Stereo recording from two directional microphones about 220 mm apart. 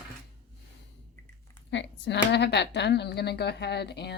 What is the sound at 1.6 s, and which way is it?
A woman's voice, 55° left (ahead or behind).